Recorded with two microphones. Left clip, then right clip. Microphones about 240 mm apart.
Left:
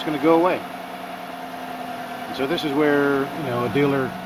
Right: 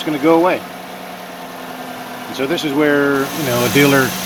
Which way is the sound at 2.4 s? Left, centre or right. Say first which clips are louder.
Right 5 dB; centre.